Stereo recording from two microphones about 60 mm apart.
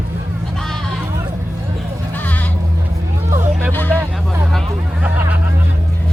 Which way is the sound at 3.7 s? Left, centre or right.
Left.